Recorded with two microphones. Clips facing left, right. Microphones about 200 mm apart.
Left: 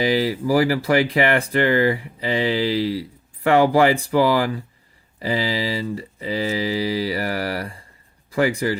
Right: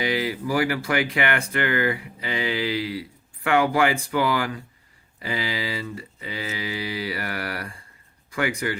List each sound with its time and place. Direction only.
0.0 s speech: 35° left (ahead or behind)